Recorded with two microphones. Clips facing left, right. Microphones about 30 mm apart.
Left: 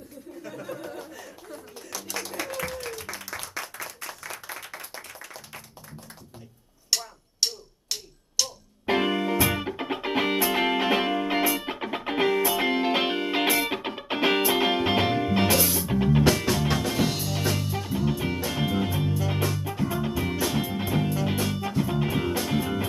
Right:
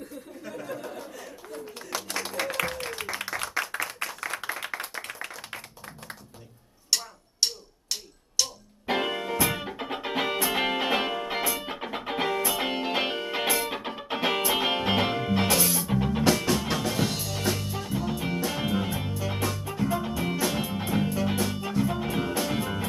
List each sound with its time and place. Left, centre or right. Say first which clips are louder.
0.4 s chuckle: even; centre
1.9 s a sound: right 3 dB; right
2.4 s applause: right 4 dB; right
3.7 s clapping: right 6 dB; right
6.9 s a sound: even; centre
10.0 s music: left 3 dB; centre